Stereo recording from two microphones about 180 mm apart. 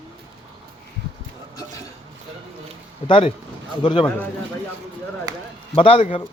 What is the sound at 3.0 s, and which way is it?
Speech, 30° left (ahead or behind).